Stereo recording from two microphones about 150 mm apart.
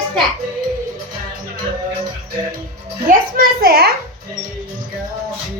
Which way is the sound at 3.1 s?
80° right.